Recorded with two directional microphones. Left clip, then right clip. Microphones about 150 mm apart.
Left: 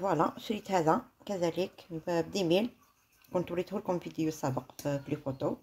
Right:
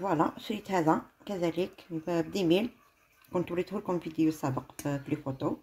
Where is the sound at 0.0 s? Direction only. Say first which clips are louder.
Even; 5° left (ahead or behind).